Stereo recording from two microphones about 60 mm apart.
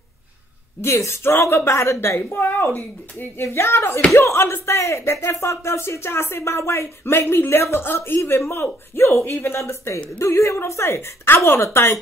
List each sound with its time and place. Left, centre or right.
0.7 s speech: left
3.5 s speech: left